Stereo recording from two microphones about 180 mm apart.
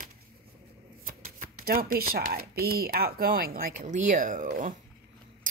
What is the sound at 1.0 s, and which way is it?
Shuffling cards, 50° right (ahead or behind).